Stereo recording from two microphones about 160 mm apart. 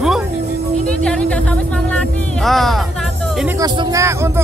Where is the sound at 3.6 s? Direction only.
20° right (ahead or behind).